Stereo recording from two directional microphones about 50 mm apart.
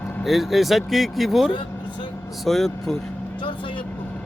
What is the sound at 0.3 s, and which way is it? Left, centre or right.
Speech, centre.